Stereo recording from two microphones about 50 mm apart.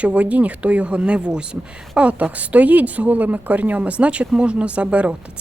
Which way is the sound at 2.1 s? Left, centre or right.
Right.